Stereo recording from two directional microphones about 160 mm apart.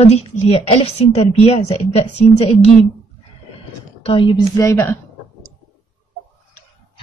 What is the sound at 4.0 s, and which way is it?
Speech, 35° left (ahead or behind).